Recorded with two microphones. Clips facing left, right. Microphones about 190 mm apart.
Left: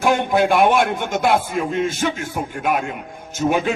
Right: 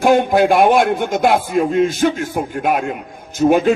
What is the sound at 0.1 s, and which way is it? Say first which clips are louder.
Speech: right 5 dB; 50° right (ahead or behind).